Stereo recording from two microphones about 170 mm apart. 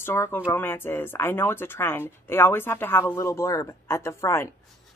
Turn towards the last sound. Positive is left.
turn(degrees=15)  # may be behind; listen again after turning